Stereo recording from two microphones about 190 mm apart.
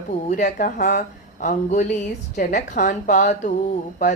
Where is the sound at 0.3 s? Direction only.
40° left (ahead or behind).